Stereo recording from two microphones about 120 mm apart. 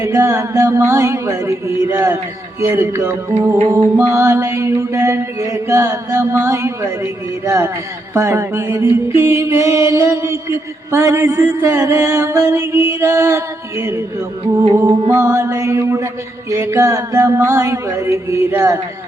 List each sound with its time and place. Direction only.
0.0 s mantra: 25° right (ahead or behind)
1.9 s music: 15° right (ahead or behind)
2.6 s mantra: 20° right (ahead or behind)
15.0 s mantra: 25° right (ahead or behind)